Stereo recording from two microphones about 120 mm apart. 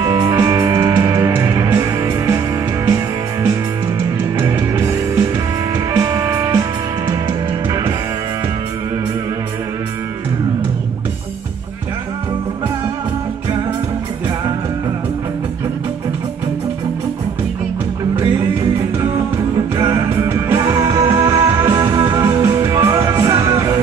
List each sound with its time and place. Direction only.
0.0 s music: 30° right (ahead or behind)
6.1 s music: 25° right (ahead or behind)
19.8 s music: 25° right (ahead or behind)
20.7 s music: 40° right (ahead or behind)
21.3 s music: 25° right (ahead or behind)